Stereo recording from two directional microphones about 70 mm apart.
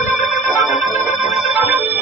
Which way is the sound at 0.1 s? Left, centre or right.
Right.